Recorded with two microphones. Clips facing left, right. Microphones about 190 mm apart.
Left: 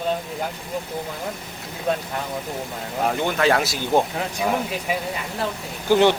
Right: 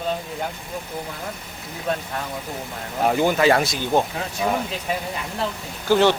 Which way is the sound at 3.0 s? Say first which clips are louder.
Right 3 dB; centre (ahead or behind).